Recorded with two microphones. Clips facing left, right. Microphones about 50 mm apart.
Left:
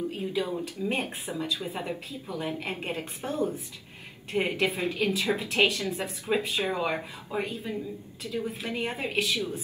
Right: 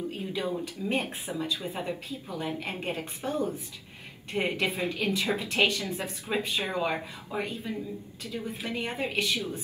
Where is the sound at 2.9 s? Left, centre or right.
Left.